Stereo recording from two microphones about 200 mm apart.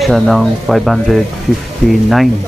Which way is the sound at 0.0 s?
Centre (ahead or behind).